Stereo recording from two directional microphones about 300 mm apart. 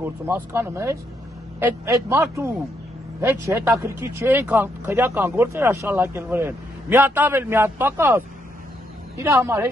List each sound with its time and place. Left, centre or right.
0.0 s speech: centre